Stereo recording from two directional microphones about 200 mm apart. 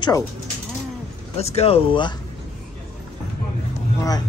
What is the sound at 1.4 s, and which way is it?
Speech, 30° left (ahead or behind).